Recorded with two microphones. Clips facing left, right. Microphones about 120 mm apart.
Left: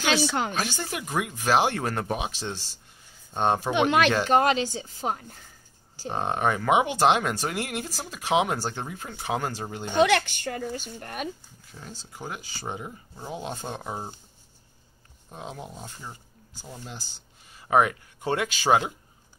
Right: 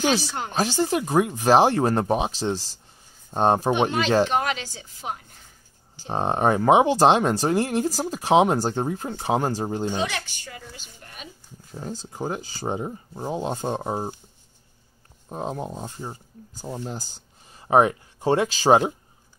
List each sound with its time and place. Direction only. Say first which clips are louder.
0.0 s speech: right 1 dB; 90° left
0.6 s speech: right 8 dB; 30° right (ahead or behind)
4.3 s speech: left 4 dB; 35° left (ahead or behind)
6.0 s speech: right 4 dB; 30° right (ahead or behind)
9.9 s a woman's voice: left 7 dB; 70° left (ahead or behind); by 11.2 s 55° left (ahead or behind)
11.7 s speech: right 9 dB; 35° right (ahead or behind)
15.2 s speech: right 8 dB; 40° right (ahead or behind)